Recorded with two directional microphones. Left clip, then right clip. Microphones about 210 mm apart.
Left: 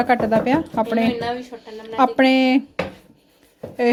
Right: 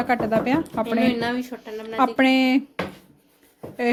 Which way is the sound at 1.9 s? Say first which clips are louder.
Left 3 dB; 5° left (ahead or behind).